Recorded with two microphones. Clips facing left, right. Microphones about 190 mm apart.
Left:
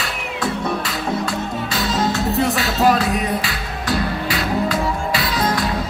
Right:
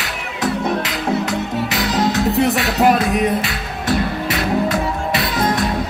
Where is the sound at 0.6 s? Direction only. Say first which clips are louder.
Right 3 dB; 20° right (ahead or behind).